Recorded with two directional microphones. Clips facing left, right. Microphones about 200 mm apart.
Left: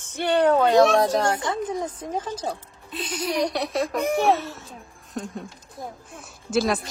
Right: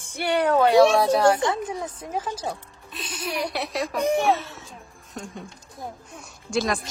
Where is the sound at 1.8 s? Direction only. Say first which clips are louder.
Left 3 dB; 30° left (ahead or behind).